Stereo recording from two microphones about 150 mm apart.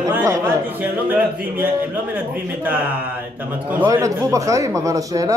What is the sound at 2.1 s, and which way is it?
Speech, 10° right (ahead or behind).